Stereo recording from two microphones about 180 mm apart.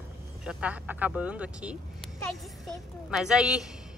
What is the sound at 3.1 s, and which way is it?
Speech, 5° right (ahead or behind).